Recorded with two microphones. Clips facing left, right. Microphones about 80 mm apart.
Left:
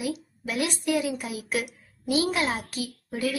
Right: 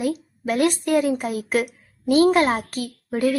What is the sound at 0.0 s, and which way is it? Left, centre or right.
A woman's voice, right.